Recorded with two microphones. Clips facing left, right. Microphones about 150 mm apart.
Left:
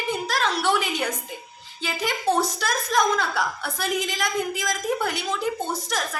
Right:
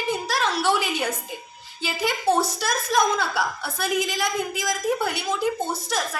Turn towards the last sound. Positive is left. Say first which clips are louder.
# right 1 dB
turn(degrees=-10)  # may be behind; listen again after turning